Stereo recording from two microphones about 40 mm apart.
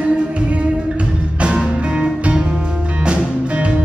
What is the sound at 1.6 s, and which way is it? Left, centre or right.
Music, centre.